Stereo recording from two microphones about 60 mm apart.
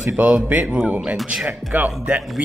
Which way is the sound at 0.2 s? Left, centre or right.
Right.